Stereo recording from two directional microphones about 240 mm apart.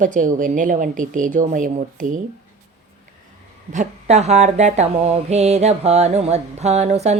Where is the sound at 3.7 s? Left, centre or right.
Right.